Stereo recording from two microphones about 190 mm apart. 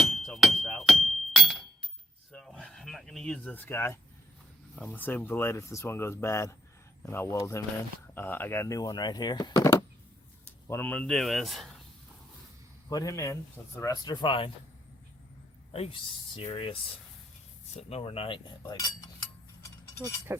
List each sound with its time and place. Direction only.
0.0 s a sound: centre (ahead or behind)
1.0 s chink: centre (ahead or behind)
2.3 s a sound: 5° left (ahead or behind)
4.7 s speech: 5° left (ahead or behind)
12.9 s speech: 20° left (ahead or behind)
13.7 s cutlery: 20° left (ahead or behind)
15.7 s cutlery: 30° left (ahead or behind)
17.7 s cutlery: 30° left (ahead or behind)
19.6 s keys jangling: 15° left (ahead or behind)